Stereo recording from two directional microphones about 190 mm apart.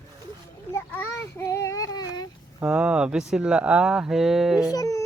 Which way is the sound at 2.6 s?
5° right (ahead or behind).